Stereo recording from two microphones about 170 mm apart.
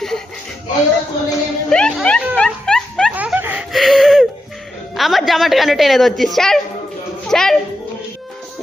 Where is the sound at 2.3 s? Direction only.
5° left (ahead or behind).